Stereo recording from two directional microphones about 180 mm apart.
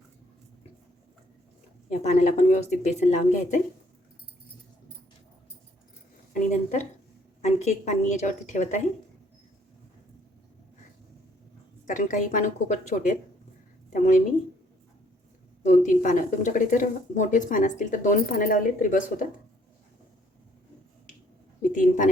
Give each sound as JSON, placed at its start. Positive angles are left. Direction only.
{"t": 1.9, "sound": "speech", "side_deg": 40}
{"t": 6.3, "sound": "a woman's voice", "side_deg": 40}
{"t": 11.9, "sound": "speech", "side_deg": 45}
{"t": 15.6, "sound": "speech", "side_deg": 45}
{"t": 21.6, "sound": "a woman's voice", "side_deg": 45}